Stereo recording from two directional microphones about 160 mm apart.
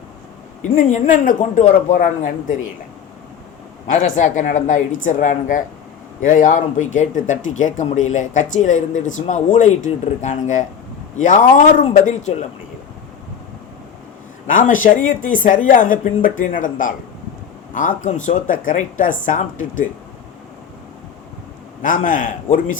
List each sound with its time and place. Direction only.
0.6 s speech: 50° left (ahead or behind)
3.8 s speech: 55° left (ahead or behind)
14.4 s speech: 55° left (ahead or behind)
21.8 s speech: 55° left (ahead or behind)